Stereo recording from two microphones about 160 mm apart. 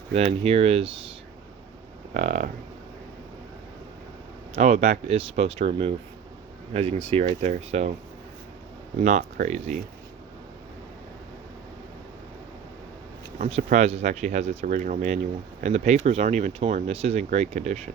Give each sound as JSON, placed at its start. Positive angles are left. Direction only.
{"t": 0.1, "sound": "speech", "side_deg": -40}
{"t": 2.1, "sound": "speech", "side_deg": -50}
{"t": 4.5, "sound": "speech", "side_deg": -45}
{"t": 9.0, "sound": "speech", "side_deg": -50}
{"t": 13.4, "sound": "speech", "side_deg": -50}